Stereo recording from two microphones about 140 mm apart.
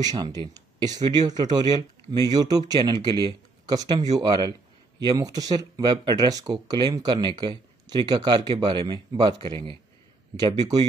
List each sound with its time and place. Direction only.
0.0 s speech: 30° right (ahead or behind)